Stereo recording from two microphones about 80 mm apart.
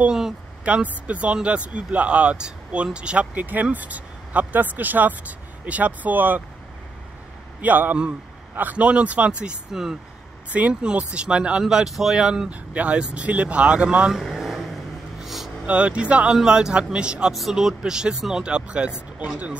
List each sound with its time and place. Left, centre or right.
0.0 s speech: centre
7.6 s speech: right; by 15.5 s centre
15.6 s speech: centre